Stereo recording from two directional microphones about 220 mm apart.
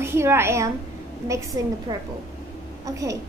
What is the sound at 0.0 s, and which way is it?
A child's voice, 10° right (ahead or behind).